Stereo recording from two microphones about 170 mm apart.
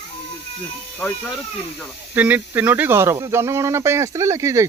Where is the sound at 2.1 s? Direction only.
10° right (ahead or behind).